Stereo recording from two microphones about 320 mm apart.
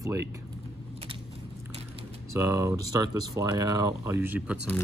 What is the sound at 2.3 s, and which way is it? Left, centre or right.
Speech, centre.